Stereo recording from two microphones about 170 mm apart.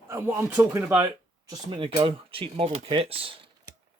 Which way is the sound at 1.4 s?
25° right (ahead or behind).